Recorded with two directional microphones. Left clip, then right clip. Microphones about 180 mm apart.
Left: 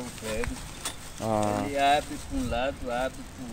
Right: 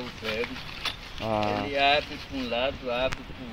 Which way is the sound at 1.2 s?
25° left (ahead or behind).